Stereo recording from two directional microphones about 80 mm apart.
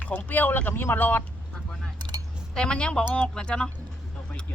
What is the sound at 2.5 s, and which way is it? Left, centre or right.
Speech, centre.